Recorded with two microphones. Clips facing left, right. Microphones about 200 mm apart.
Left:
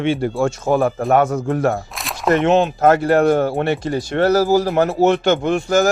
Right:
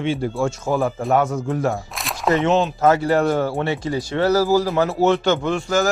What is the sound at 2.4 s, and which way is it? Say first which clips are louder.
Speech: left 3 dB; 55° left (ahead or behind).